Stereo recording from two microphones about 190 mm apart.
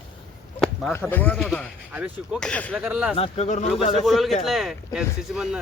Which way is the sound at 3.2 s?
30° left (ahead or behind).